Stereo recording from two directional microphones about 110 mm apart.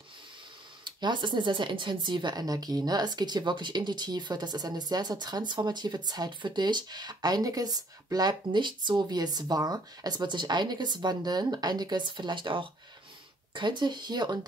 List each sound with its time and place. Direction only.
0.8 s speech: 45° right (ahead or behind)